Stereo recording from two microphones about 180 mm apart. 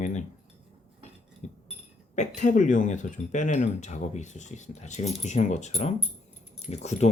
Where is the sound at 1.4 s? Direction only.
40° left (ahead or behind).